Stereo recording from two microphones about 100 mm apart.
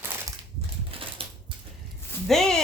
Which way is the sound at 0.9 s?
65° right (ahead or behind).